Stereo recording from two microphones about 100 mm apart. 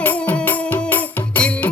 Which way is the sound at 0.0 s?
15° left (ahead or behind).